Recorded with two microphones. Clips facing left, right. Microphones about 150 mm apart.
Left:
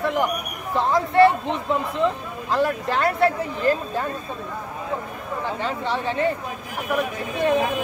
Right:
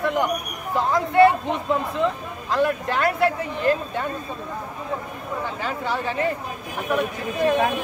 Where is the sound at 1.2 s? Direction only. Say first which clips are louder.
Right 1 dB; centre (ahead or behind).